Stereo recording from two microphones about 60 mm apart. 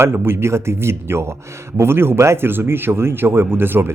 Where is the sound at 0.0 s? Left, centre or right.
Right.